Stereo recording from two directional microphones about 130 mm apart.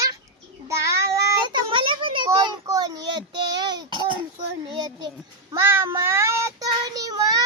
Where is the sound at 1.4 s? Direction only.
35° right (ahead or behind).